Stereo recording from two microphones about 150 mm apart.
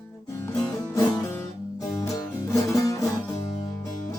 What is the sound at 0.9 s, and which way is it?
Music, 20° left (ahead or behind).